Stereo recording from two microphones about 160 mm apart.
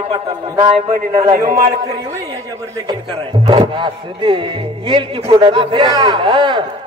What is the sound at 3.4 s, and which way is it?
Speech, 30° right (ahead or behind).